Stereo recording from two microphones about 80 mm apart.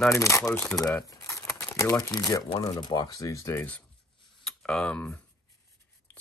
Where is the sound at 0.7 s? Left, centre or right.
Left.